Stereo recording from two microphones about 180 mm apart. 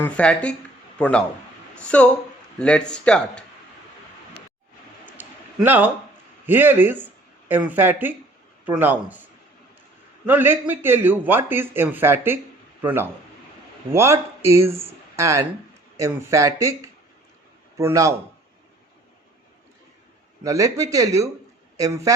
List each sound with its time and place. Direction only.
0.0 s a man's voice: 5° left (ahead or behind)
5.1 s a sound: 10° right (ahead or behind)
6.4 s speech: 10° right (ahead or behind)
20.4 s speech: 20° right (ahead or behind)